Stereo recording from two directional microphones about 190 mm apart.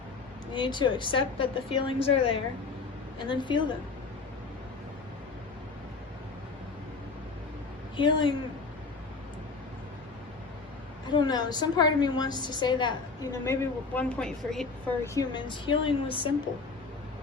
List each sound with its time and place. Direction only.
0.5 s a woman's voice: 25° left (ahead or behind)
7.9 s a woman's voice: 25° left (ahead or behind)
11.1 s a woman's voice: 20° left (ahead or behind); by 14.9 s 5° left (ahead or behind)
15.0 s a woman's voice: 20° left (ahead or behind)